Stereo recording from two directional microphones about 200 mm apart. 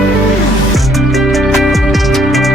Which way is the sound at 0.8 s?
Centre (ahead or behind).